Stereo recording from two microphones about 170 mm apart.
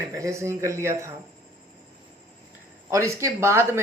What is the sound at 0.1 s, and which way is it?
Speech, 20° right (ahead or behind).